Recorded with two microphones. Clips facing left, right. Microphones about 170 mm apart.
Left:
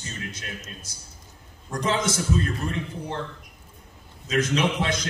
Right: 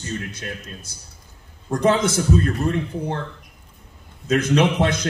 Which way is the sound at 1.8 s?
60° right (ahead or behind).